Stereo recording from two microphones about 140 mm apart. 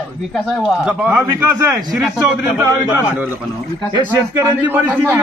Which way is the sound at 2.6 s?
15° right (ahead or behind).